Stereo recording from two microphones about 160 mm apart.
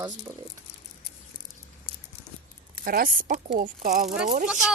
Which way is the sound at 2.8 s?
65° right (ahead or behind).